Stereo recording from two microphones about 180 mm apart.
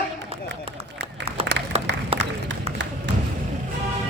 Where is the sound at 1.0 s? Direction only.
35° right (ahead or behind).